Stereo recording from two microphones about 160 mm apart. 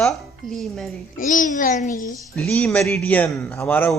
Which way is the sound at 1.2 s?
55° left (ahead or behind).